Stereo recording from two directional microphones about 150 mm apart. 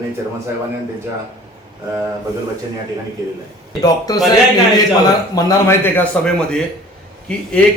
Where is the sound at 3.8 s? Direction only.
25° left (ahead or behind).